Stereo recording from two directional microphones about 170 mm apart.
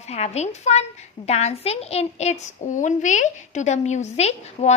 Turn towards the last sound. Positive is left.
turn(degrees=40)  # may be behind; listen again after turning